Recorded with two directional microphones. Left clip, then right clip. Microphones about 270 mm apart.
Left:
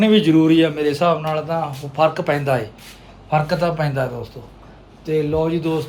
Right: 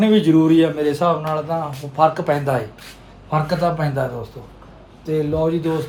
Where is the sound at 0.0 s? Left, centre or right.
Centre.